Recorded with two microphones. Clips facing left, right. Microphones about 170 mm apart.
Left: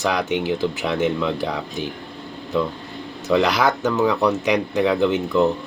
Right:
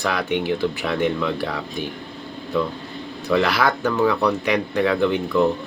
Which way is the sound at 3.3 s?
15° left (ahead or behind).